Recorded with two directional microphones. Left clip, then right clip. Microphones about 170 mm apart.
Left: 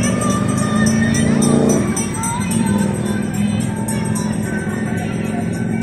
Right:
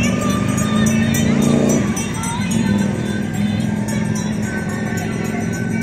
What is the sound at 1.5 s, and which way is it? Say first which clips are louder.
Music: left 2 dB; 40° right (ahead or behind).